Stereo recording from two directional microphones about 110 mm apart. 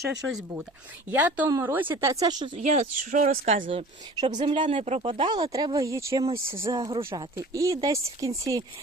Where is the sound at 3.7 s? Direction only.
65° right (ahead or behind); by 6.2 s 25° right (ahead or behind).